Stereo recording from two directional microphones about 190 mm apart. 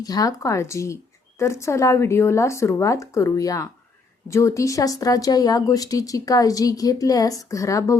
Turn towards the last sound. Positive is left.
turn(degrees=15)  # may be behind; listen again after turning